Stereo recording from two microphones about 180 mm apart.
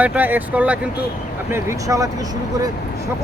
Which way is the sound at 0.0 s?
10° right (ahead or behind).